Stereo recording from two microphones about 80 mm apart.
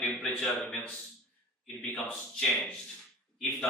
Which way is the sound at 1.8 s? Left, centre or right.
Centre.